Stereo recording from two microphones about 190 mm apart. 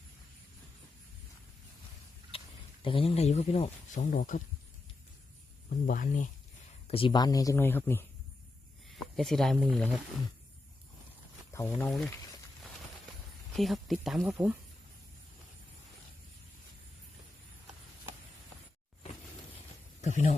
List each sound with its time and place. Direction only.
2.3 s a sound: 30° left (ahead or behind)
2.8 s speech: 30° left (ahead or behind)
5.8 s speech: 45° left (ahead or behind)
6.8 s speech: 30° left (ahead or behind); by 8.0 s 10° left (ahead or behind)
9.1 s speech: centre (ahead or behind)
11.5 s speech: 10° left (ahead or behind)
13.6 s speech: centre (ahead or behind)
20.0 s speech: 40° left (ahead or behind)